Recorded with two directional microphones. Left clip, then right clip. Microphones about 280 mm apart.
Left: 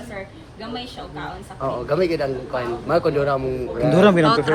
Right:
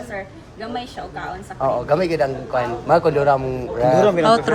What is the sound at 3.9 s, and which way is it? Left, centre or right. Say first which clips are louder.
Speech: left 1 dB; left.